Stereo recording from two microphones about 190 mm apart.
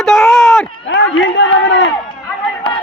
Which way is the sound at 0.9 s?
75° left (ahead or behind).